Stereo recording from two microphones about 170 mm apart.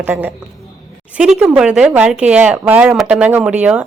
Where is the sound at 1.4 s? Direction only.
5° right (ahead or behind).